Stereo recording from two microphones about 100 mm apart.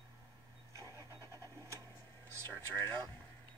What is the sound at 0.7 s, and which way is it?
Vehicle, 30° right (ahead or behind).